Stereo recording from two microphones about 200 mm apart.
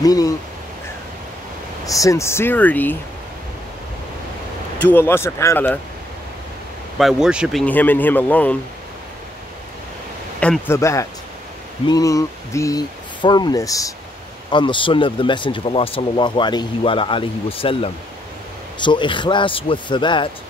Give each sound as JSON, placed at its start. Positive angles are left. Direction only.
{"t": 0.0, "sound": "speech", "side_deg": 20}
{"t": 1.9, "sound": "speech", "side_deg": 15}
{"t": 4.8, "sound": "speech", "side_deg": 10}
{"t": 7.0, "sound": "speech", "side_deg": 0}
{"t": 7.6, "sound": "speech", "side_deg": 10}
{"t": 10.4, "sound": "speech", "side_deg": 10}